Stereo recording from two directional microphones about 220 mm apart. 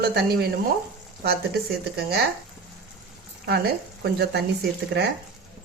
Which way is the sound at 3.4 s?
45° right (ahead or behind).